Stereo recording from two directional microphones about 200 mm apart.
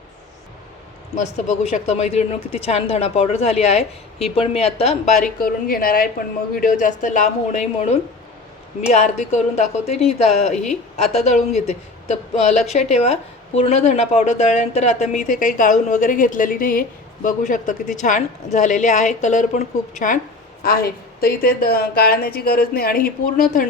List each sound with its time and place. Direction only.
1.1 s speech: 35° left (ahead or behind)
5.4 s a woman's voice: 45° left (ahead or behind)